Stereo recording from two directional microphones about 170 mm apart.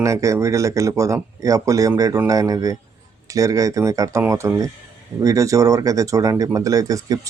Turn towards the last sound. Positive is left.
turn(degrees=-20)  # may be behind; listen again after turning